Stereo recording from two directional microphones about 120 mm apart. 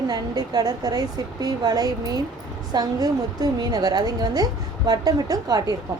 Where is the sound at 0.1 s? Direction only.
30° right (ahead or behind).